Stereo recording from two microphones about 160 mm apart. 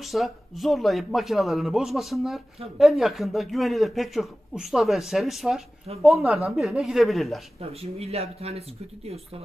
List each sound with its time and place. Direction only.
0.0 s a man's voice: centre (ahead or behind)
7.8 s speech: 40° right (ahead or behind)